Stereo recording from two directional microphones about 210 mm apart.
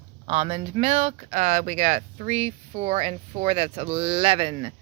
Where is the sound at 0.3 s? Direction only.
30° right (ahead or behind).